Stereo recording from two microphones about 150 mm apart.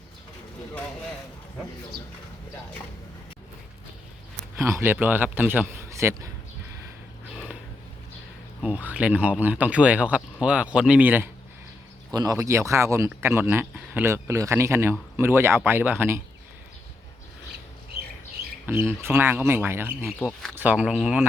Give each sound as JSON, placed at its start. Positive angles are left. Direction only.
{"t": 4.5, "sound": "speech", "side_deg": -15}
{"t": 8.6, "sound": "speech", "side_deg": -10}
{"t": 12.1, "sound": "speech", "side_deg": -25}
{"t": 18.6, "sound": "speech", "side_deg": -15}